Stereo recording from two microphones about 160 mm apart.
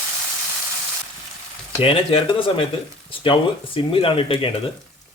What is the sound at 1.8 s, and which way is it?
Speech, 35° left (ahead or behind).